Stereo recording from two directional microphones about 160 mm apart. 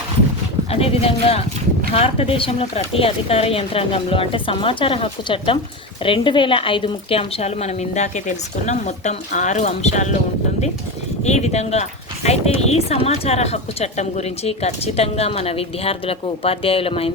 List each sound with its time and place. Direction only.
0.7 s a woman's voice: 40° left (ahead or behind)
11.2 s a woman's voice: 45° left (ahead or behind)